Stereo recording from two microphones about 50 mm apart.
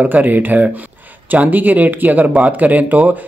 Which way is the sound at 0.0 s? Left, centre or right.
Right.